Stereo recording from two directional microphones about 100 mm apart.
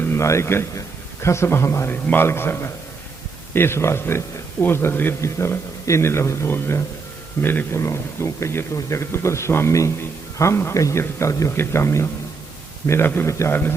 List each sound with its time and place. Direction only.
0.0 s a man's voice: 25° left (ahead or behind)